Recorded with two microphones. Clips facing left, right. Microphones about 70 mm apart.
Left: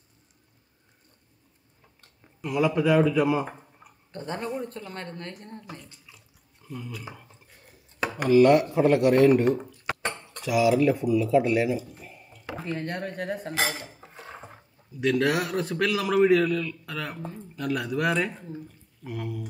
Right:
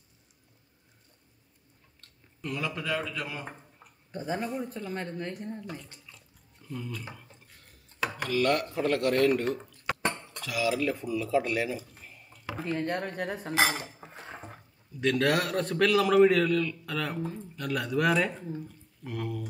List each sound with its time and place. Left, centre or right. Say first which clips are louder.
2.4 s speech: left 10 dB; centre
4.1 s speech: even; centre
6.0 s a sound: even; centre
7.6 s a man's voice: left 3 dB; centre
13.6 s cutlery: right 4 dB; right
13.9 s dishes: even; centre
15.0 s a man's voice: left 2 dB; centre